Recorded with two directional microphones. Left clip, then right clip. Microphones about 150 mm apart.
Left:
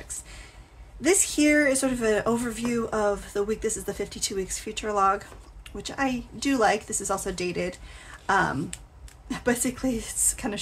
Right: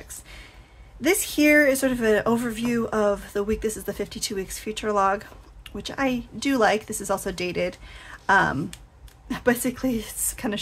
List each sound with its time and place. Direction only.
1.0 s speech: 35° right (ahead or behind)